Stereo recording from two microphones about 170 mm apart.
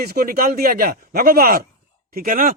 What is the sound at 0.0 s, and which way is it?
A man's voice, 65° right (ahead or behind).